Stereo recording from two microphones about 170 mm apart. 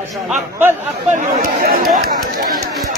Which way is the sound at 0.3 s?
10° right (ahead or behind).